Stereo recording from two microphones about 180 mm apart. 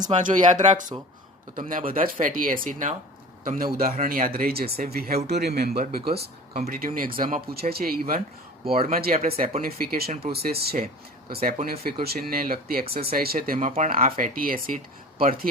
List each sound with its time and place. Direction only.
0.0 s speech: 45° right (ahead or behind)